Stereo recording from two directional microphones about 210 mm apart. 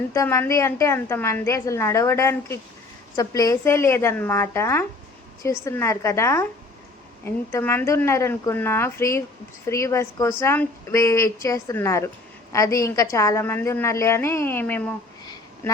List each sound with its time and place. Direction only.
0.1 s a woman's voice: 15° left (ahead or behind)